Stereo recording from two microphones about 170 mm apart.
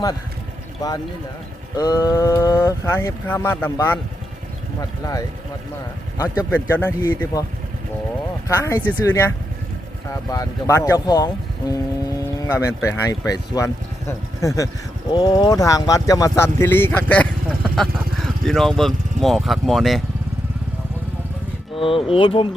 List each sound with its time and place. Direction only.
1.7 s speech: 25° left (ahead or behind)
6.5 s speech: 10° left (ahead or behind)
8.4 s speech: 15° left (ahead or behind); by 20.0 s centre (ahead or behind)
21.8 s speech: 30° left (ahead or behind)